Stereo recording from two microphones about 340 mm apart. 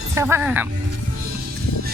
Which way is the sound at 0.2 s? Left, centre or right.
Centre.